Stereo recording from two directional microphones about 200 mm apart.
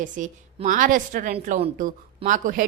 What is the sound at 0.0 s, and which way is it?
A woman's voice, 40° right (ahead or behind).